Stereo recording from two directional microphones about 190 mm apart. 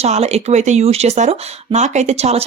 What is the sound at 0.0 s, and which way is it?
Speech, 35° right (ahead or behind).